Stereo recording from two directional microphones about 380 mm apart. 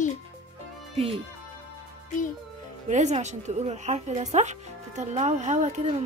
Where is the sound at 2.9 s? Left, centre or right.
Centre.